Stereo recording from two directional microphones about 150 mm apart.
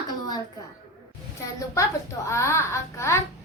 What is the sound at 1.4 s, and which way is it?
A child's voice, 20° left (ahead or behind).